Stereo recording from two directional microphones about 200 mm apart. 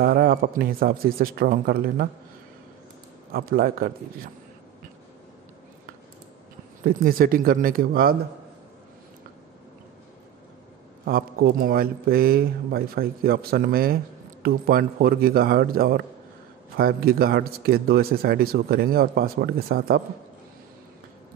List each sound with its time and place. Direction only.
0.0 s a man's voice: 45° right (ahead or behind)
3.3 s a man's voice: 50° right (ahead or behind)
6.8 s a man's voice: 45° right (ahead or behind)
11.1 s a man's voice: 50° right (ahead or behind)